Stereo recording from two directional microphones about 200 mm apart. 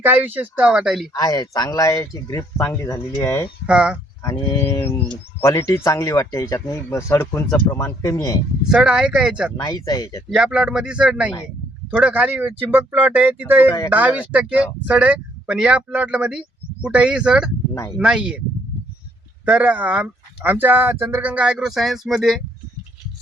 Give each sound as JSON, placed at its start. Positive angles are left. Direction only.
{"t": 0.0, "sound": "speech", "side_deg": -10}
{"t": 1.1, "sound": "speech", "side_deg": 20}
{"t": 3.7, "sound": "speech", "side_deg": -5}
{"t": 4.2, "sound": "speech", "side_deg": 15}
{"t": 8.6, "sound": "speech", "side_deg": -5}
{"t": 9.6, "sound": "speech", "side_deg": 20}
{"t": 10.2, "sound": "speech", "side_deg": -5}
{"t": 19.5, "sound": "speech", "side_deg": -5}